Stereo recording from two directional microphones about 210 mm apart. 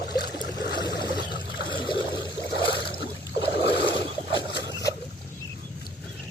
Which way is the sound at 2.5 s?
50° left (ahead or behind).